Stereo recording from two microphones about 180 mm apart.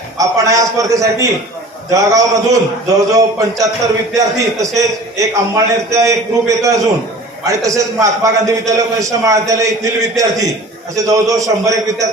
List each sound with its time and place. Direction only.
0.2 s a man's voice: 20° right (ahead or behind)